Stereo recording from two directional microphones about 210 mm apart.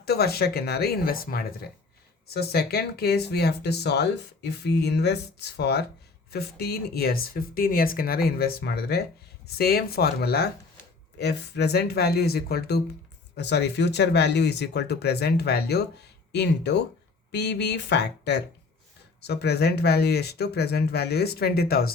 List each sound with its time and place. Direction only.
0.0 s speech: 50° left (ahead or behind)